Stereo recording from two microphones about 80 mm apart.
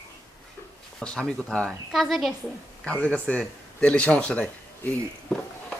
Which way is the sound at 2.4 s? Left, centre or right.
Centre.